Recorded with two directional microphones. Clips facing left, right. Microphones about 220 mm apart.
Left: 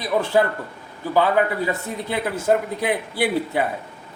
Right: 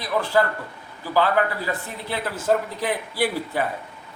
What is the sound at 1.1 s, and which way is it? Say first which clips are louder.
A man's voice: left 2 dB; 20° left (ahead or behind).